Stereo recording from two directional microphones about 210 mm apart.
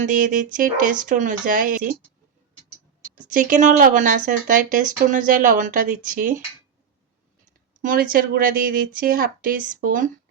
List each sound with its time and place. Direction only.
0.0 s speech: 40° right (ahead or behind)
3.2 s speech: 40° right (ahead or behind)
7.8 s speech: 40° right (ahead or behind)